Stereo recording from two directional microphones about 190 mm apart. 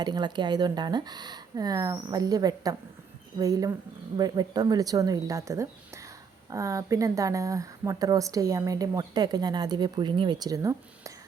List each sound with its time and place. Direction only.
0.0 s a woman's voice: 25° right (ahead or behind)